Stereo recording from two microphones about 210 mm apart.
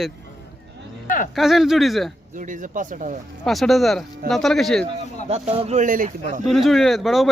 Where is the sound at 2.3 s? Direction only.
40° right (ahead or behind).